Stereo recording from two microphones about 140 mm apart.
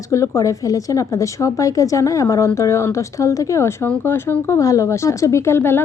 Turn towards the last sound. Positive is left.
turn(degrees=15)  # may be behind; listen again after turning